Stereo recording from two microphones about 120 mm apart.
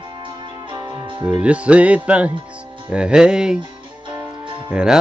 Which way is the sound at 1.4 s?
10° right (ahead or behind).